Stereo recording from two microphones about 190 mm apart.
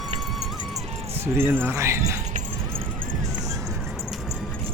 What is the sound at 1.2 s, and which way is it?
Speech, 10° right (ahead or behind).